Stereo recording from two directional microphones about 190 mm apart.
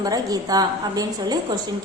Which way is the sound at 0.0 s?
20° right (ahead or behind).